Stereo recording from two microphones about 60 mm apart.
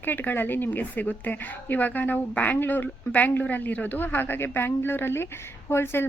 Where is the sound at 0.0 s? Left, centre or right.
Left.